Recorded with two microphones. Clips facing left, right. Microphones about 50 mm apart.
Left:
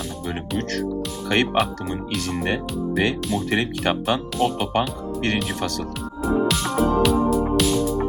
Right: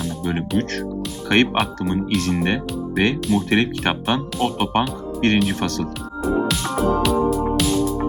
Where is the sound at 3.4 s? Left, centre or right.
Right.